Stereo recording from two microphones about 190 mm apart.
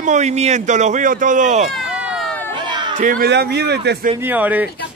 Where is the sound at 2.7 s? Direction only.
25° right (ahead or behind).